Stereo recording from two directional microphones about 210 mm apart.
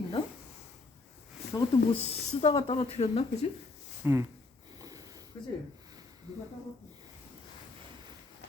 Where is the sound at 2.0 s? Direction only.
30° left (ahead or behind).